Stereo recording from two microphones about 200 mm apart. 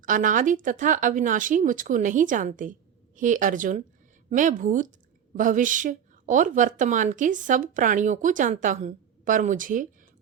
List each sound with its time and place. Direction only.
0.0 s a woman's voice: 40° right (ahead or behind)